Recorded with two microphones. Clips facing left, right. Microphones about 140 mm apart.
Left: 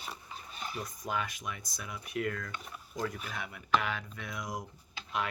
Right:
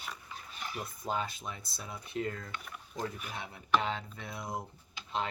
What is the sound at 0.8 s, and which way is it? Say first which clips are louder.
Speech: right 2 dB; 30° right (ahead or behind).